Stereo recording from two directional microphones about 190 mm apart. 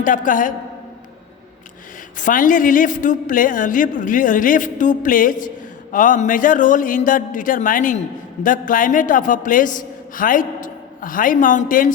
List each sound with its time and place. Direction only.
0.0 s a woman's voice: 45° left (ahead or behind)
2.1 s a woman's voice: 45° left (ahead or behind)